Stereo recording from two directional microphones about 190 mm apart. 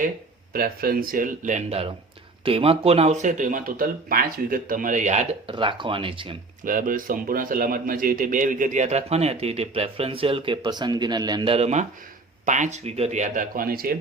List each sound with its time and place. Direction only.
0.5 s speech: 50° right (ahead or behind)
5.5 s speech: 25° right (ahead or behind)
6.7 s speech: 45° right (ahead or behind)